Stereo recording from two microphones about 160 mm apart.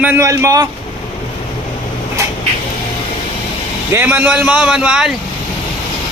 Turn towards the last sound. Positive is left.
turn(degrees=-5)  # may be behind; listen again after turning